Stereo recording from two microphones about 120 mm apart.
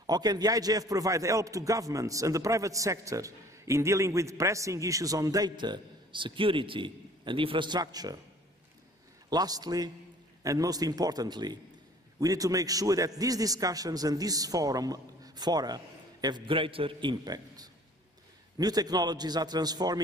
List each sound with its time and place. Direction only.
0.0 s speech: 35° right (ahead or behind)
9.3 s a man's voice: 35° right (ahead or behind)